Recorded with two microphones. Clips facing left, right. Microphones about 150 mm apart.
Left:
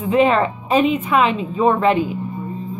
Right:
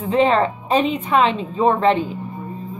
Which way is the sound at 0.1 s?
30° right (ahead or behind).